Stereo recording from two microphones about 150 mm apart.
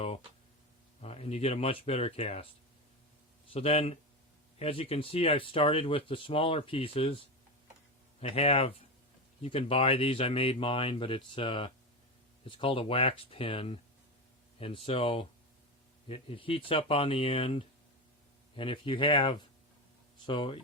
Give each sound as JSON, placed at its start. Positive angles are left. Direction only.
{"t": 1.0, "sound": "speech", "side_deg": 45}
{"t": 3.5, "sound": "speech", "side_deg": 40}
{"t": 8.2, "sound": "speech", "side_deg": 40}